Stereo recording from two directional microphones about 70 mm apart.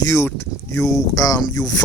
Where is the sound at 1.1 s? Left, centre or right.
Left.